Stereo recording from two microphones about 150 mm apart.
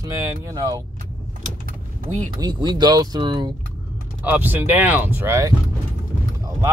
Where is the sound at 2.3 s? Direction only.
25° right (ahead or behind).